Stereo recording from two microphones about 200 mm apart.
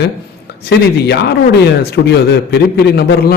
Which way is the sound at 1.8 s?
55° left (ahead or behind).